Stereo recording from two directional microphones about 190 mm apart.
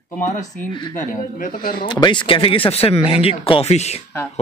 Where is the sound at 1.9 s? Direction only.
25° left (ahead or behind).